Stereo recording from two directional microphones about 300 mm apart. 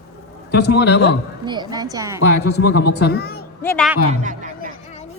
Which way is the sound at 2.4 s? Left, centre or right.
Left.